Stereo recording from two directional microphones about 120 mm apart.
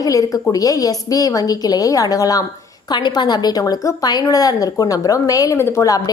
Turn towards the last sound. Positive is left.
turn(degrees=30)  # may be behind; listen again after turning